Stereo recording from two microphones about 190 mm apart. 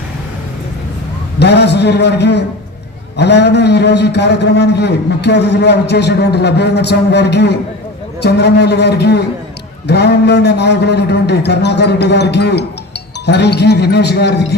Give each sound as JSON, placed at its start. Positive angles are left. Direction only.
{"t": 1.4, "sound": "a man's voice", "side_deg": 60}